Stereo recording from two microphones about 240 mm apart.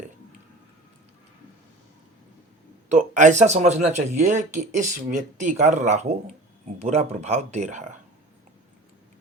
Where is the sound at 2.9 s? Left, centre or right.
Right.